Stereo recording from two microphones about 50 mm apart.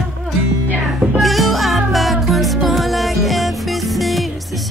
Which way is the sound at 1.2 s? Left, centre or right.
Centre.